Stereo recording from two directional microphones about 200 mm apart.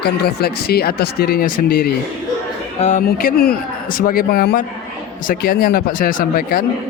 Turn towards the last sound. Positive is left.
turn(degrees=45)  # may be behind; listen again after turning